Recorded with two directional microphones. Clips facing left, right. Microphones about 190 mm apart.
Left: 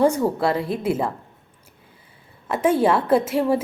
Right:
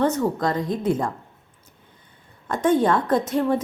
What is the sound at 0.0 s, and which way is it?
A woman's voice, 10° left (ahead or behind).